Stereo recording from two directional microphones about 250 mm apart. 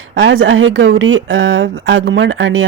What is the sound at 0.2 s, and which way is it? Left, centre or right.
Speech, right.